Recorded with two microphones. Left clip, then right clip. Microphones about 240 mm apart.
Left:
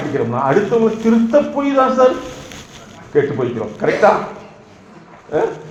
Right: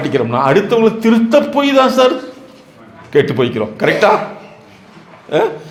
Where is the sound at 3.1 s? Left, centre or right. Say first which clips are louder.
Right 4 dB; right.